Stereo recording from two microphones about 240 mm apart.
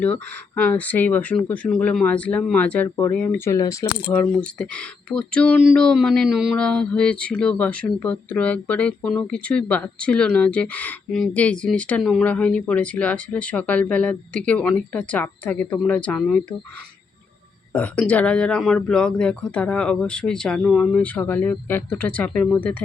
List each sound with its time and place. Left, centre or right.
0.0 s speech: centre
17.7 s speech: centre